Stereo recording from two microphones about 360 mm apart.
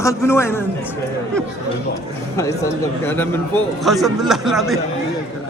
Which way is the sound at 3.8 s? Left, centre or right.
Centre.